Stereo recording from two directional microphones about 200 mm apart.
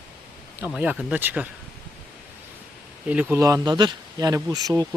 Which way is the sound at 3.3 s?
15° right (ahead or behind).